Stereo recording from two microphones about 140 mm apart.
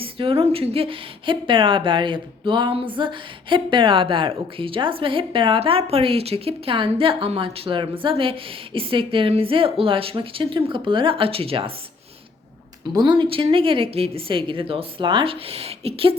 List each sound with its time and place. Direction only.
0.0 s speech: 40° right (ahead or behind)
12.9 s speech: 30° right (ahead or behind)